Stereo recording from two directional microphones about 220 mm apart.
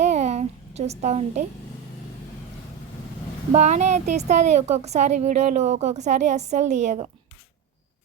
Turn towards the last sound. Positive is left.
turn(degrees=-30)  # may be behind; listen again after turning